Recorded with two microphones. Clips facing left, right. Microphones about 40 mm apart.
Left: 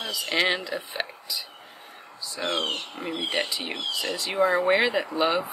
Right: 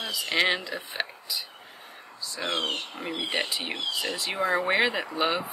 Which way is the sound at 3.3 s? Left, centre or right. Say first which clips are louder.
Left 1 dB; right.